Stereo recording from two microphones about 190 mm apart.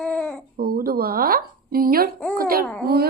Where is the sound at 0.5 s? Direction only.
50° right (ahead or behind).